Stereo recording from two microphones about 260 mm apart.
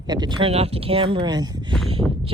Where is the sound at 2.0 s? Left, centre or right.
Centre.